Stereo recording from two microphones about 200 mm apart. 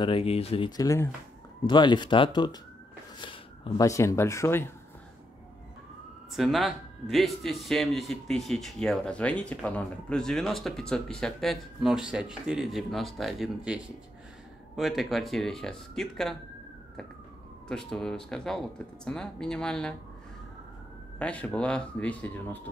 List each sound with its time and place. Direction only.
0.0 s speech: 25° left (ahead or behind); by 4.7 s 10° left (ahead or behind)
6.3 s speech: centre (ahead or behind)
14.8 s speech: centre (ahead or behind)
17.6 s speech: centre (ahead or behind)
21.2 s speech: 5° left (ahead or behind)